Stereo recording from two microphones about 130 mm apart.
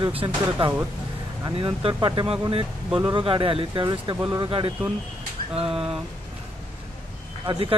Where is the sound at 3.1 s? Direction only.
40° right (ahead or behind).